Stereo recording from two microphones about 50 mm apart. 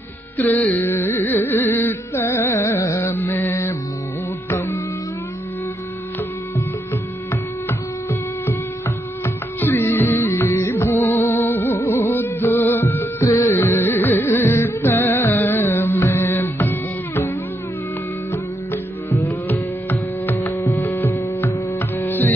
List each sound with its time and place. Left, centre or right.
0.4 s carnatic music: left
2.6 s carnatic music: left
3.1 s mantra: left
7.6 s music: left
10.2 s music: left
18.3 s music: left
19.4 s music: left
20.7 s hum: left
21.4 s music: left